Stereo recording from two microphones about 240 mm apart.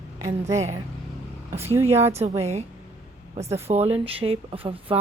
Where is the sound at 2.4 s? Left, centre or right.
Right.